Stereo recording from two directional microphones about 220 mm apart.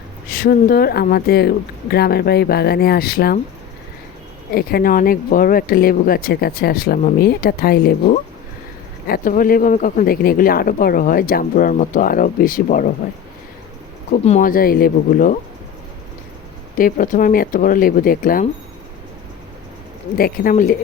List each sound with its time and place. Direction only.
0.3 s speech: 40° left (ahead or behind)
4.5 s speech: 40° left (ahead or behind)
14.3 s speech: 35° left (ahead or behind)
16.7 s speech: 40° left (ahead or behind)
20.1 s speech: 40° left (ahead or behind)